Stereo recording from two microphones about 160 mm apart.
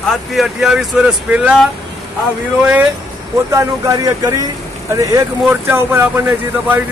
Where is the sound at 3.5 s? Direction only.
20° right (ahead or behind).